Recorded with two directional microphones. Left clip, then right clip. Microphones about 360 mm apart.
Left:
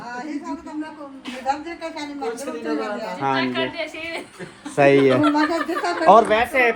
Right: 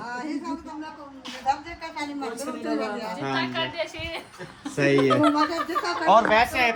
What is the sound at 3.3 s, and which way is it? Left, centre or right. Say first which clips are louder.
Speech: left 4 dB; right.